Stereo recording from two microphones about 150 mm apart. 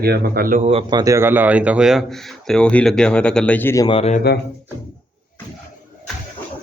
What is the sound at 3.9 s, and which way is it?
Speech, 40° left (ahead or behind).